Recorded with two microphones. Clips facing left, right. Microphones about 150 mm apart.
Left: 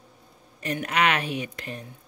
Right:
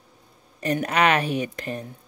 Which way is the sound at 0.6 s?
40° right (ahead or behind).